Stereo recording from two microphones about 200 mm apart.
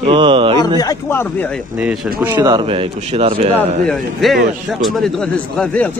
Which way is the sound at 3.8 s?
Centre (ahead or behind).